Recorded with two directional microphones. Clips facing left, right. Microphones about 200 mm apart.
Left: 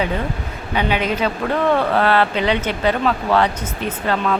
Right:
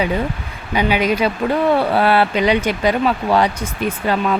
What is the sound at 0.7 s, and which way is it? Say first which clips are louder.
Speech: right 3 dB; 10° right (ahead or behind).